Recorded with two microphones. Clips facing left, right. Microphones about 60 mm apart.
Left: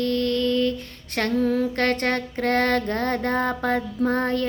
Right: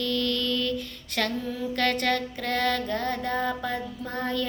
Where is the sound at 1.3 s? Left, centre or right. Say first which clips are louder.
Left 8 dB; left.